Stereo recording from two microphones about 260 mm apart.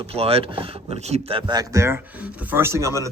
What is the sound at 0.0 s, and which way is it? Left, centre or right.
Speech, right.